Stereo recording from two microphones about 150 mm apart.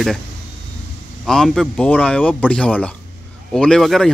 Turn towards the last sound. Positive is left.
turn(degrees=0)  # may be behind; listen again after turning